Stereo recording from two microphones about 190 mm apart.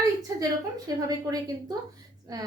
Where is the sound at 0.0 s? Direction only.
20° right (ahead or behind).